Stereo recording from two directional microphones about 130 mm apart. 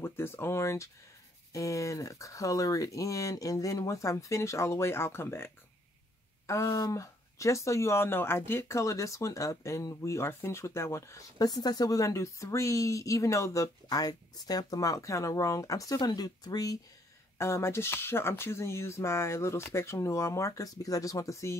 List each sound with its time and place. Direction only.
0.0 s speech: 20° left (ahead or behind)